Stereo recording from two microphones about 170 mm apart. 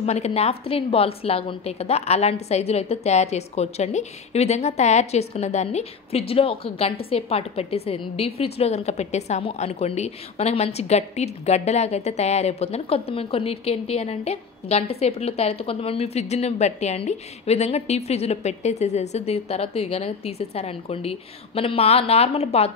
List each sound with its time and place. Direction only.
0.0 s a woman's voice: 40° left (ahead or behind)